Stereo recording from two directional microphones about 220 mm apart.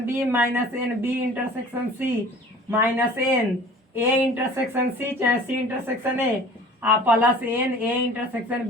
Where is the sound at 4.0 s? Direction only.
10° right (ahead or behind).